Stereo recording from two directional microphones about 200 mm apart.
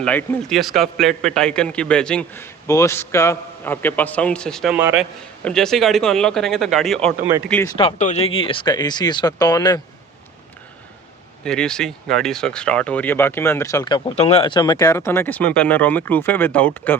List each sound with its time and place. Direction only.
0.0 s a man's voice: 5° left (ahead or behind)
7.8 s speech: 35° left (ahead or behind)
11.4 s speech: 5° left (ahead or behind)